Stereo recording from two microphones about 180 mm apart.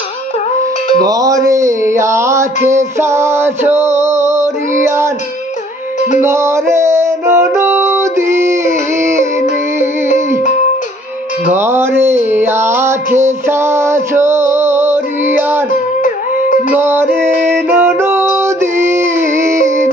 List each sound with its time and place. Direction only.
1.0 s music: 20° right (ahead or behind)
6.1 s music: 15° right (ahead or behind)
11.4 s a sound: 10° right (ahead or behind)
16.0 s music: 45° left (ahead or behind)
16.7 s music: 10° right (ahead or behind)